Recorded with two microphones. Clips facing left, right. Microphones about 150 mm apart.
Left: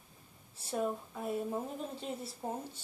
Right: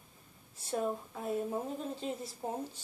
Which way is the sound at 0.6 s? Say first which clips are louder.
Right 1 dB; centre (ahead or behind).